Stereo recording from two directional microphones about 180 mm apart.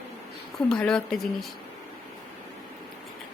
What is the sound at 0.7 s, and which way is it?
Speech, 5° left (ahead or behind).